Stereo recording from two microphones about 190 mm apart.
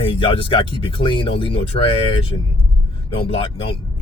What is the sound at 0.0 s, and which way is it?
Speech, 25° left (ahead or behind).